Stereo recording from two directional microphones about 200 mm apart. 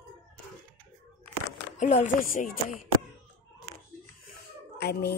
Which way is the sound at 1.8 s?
35° left (ahead or behind).